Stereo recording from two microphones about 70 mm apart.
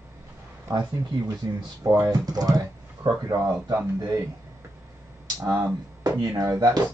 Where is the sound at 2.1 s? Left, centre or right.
Right.